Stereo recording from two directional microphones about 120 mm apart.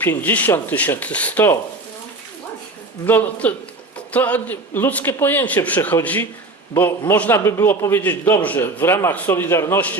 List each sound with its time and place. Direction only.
0.0 s a man's voice: 15° left (ahead or behind)
3.1 s a man's voice: 15° left (ahead or behind)